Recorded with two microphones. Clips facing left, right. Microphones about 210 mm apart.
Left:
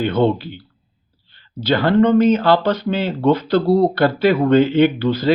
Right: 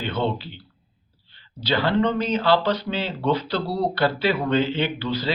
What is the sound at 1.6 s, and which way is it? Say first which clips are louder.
Speech: left 7 dB; 50° left (ahead or behind).